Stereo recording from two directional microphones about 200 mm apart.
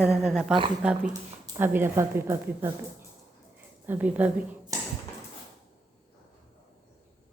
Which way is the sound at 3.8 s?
10° right (ahead or behind).